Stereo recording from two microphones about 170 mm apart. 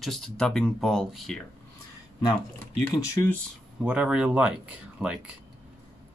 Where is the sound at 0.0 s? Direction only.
Centre (ahead or behind).